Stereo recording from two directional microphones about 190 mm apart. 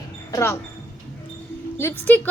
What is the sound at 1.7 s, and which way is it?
Speech, 10° left (ahead or behind).